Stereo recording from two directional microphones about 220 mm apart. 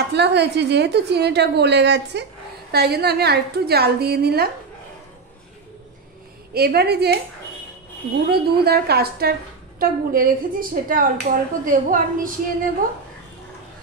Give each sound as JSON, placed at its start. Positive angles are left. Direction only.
{"t": 0.0, "sound": "a woman's voice", "side_deg": -50}
{"t": 6.5, "sound": "a woman's voice", "side_deg": -45}
{"t": 8.3, "sound": "a woman's voice", "side_deg": -45}